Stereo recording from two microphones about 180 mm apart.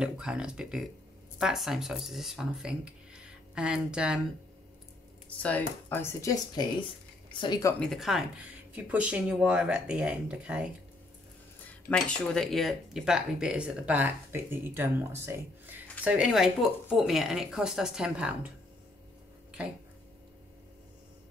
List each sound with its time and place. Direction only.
0.0 s speech: 5° right (ahead or behind)
5.4 s speech: 10° left (ahead or behind)
7.8 s speech: centre (ahead or behind)
11.6 s speech: 5° left (ahead or behind)